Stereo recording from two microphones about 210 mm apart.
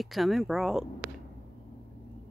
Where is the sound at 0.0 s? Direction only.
Centre (ahead or behind).